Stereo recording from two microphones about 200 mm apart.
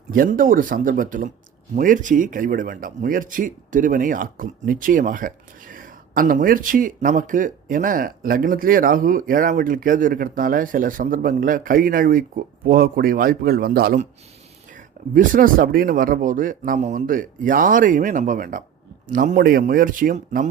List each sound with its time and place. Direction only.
0.1 s speech: 45° right (ahead or behind)